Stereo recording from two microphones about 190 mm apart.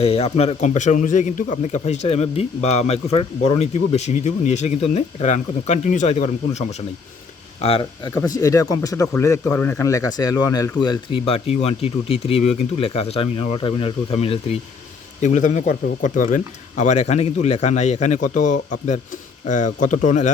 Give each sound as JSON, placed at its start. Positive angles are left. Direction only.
{"t": 0.0, "sound": "speech", "side_deg": 35}
{"t": 8.3, "sound": "speech", "side_deg": 20}
{"t": 15.2, "sound": "speech", "side_deg": 40}